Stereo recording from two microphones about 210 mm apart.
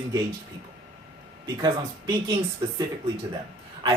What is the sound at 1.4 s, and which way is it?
Speech, 20° right (ahead or behind).